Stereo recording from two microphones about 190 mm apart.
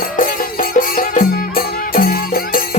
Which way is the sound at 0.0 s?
45° left (ahead or behind).